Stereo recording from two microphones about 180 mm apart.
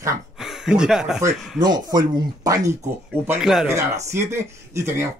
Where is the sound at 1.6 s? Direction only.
20° right (ahead or behind).